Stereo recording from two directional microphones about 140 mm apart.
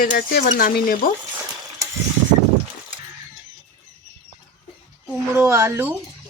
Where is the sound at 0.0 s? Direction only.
90° left.